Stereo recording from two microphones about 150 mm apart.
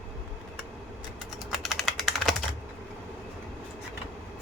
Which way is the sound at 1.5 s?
Centre (ahead or behind).